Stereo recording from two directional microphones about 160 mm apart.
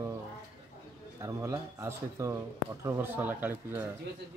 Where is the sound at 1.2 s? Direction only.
20° right (ahead or behind).